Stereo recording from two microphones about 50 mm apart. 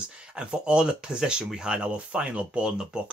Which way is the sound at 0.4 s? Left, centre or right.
Centre.